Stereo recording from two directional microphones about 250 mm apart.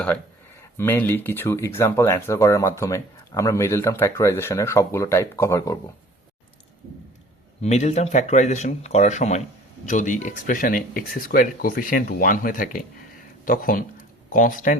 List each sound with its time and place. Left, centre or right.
0.8 s speech: centre
7.6 s speech: left